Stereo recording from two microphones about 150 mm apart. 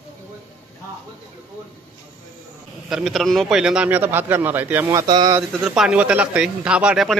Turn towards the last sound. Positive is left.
turn(degrees=-5)  # may be behind; listen again after turning